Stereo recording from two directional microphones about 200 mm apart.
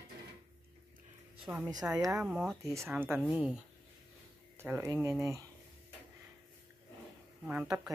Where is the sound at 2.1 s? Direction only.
Centre (ahead or behind).